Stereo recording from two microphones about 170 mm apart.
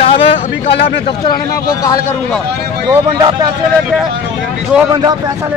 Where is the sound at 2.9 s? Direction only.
25° right (ahead or behind).